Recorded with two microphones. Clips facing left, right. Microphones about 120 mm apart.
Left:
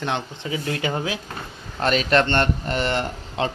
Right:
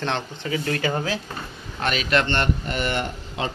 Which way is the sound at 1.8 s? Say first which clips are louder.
Left 3 dB; 35° left (ahead or behind).